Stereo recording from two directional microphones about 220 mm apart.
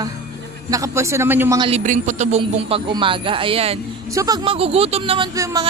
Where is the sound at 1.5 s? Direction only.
30° right (ahead or behind).